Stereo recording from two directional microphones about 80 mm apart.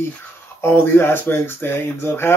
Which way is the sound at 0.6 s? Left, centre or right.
Left.